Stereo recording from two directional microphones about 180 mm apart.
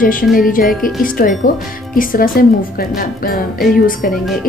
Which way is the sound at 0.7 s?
Centre (ahead or behind).